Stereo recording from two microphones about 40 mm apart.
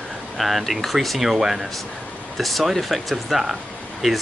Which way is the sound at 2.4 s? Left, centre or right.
Centre.